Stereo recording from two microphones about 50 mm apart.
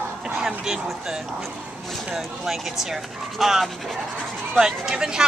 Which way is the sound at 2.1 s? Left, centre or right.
Centre.